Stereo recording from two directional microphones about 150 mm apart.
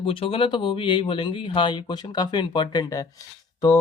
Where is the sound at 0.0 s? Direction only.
35° left (ahead or behind).